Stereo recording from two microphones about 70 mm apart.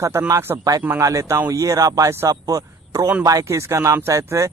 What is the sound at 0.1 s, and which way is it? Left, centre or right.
Speech, right.